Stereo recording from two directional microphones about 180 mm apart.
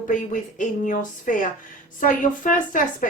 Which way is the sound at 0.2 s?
45° left (ahead or behind).